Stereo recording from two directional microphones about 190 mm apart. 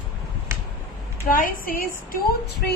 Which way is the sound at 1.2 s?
45° left (ahead or behind).